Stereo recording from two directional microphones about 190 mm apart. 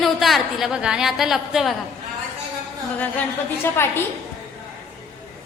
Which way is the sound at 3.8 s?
10° left (ahead or behind).